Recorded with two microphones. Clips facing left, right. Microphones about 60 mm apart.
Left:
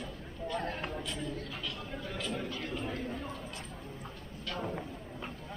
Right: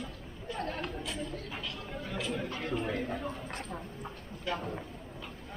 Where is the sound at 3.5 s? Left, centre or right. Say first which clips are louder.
Right 4 dB; right.